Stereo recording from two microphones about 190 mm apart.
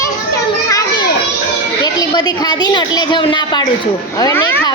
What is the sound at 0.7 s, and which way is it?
Children playing, 20° left (ahead or behind).